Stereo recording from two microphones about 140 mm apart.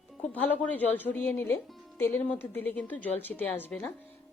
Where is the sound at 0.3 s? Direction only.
10° left (ahead or behind).